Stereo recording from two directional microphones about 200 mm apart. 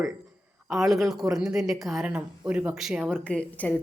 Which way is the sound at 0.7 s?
Centre (ahead or behind).